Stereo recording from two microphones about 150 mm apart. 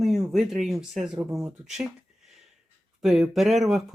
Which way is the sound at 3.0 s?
5° right (ahead or behind).